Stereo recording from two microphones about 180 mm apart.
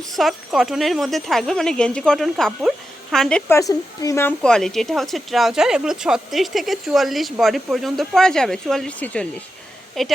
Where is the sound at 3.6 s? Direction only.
20° left (ahead or behind).